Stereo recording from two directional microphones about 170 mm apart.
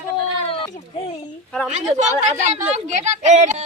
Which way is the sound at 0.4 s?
35° left (ahead or behind).